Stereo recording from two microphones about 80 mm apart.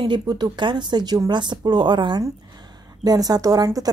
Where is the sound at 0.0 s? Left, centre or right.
Right.